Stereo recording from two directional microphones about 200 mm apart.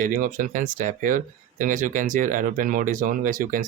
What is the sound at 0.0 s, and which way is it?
Speech, 40° right (ahead or behind).